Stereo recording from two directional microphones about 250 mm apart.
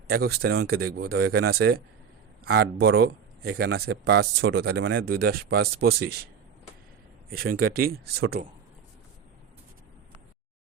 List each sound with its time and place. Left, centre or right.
0.1 s speech: right
7.3 s speech: right